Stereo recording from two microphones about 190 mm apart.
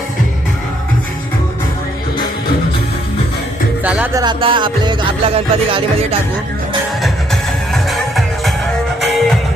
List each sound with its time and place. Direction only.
3.8 s music: 10° right (ahead or behind)
4.2 s music: 25° right (ahead or behind)
7.7 s music: centre (ahead or behind)